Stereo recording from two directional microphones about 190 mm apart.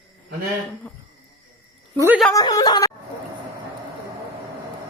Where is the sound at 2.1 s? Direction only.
Centre (ahead or behind).